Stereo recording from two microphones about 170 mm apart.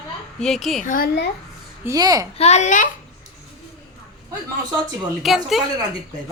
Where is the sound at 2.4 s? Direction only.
40° left (ahead or behind).